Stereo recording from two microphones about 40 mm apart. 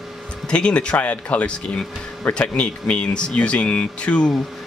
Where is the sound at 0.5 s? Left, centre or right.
Left.